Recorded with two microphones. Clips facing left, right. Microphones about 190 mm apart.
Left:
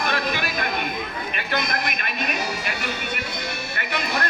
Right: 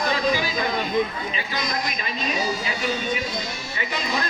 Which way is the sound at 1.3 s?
65° left (ahead or behind).